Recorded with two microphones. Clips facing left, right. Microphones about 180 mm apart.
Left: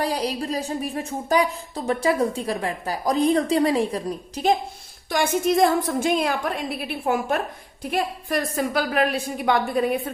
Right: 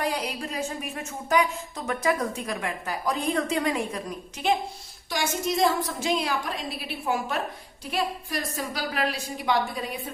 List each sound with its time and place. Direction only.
0.0 s a woman's voice: 35° left (ahead or behind)
5.1 s a woman's voice: 55° left (ahead or behind)